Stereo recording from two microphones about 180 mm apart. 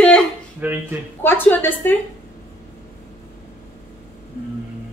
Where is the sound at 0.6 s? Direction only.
10° right (ahead or behind).